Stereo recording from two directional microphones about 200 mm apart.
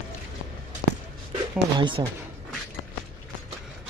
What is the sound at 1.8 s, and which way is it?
Speech, 25° right (ahead or behind).